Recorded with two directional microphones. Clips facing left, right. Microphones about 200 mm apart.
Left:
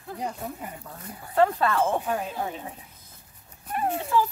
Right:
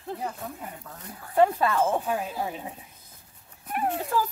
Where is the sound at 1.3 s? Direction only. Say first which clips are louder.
Even; 15° right (ahead or behind).